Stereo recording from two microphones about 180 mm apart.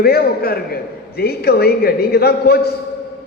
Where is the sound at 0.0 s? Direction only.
60° left (ahead or behind).